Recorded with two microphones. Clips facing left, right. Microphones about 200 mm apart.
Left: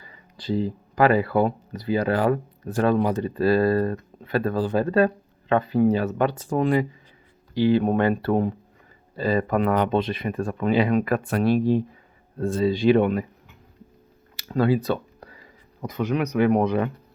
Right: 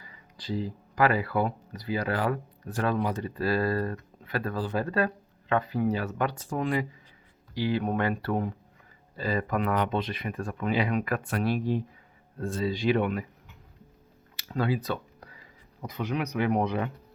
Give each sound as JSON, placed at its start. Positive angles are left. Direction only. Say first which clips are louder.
{"t": 0.0, "sound": "speech", "louder": "left 7 dB", "side_deg": 30}
{"t": 14.4, "sound": "a sound", "louder": "left 7 dB", "side_deg": 40}
{"t": 15.9, "sound": "speech", "louder": "left 6 dB", "side_deg": 45}